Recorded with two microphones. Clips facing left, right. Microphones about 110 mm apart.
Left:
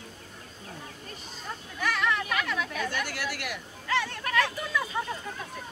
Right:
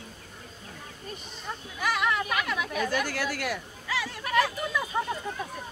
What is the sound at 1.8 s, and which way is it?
Chatter, 15° right (ahead or behind).